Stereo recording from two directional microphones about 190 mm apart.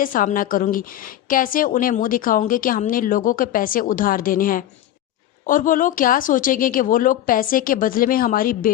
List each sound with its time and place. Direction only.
0.0 s a woman's voice: 45° left (ahead or behind)